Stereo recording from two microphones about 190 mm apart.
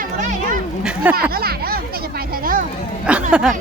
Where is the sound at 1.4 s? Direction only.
55° right (ahead or behind).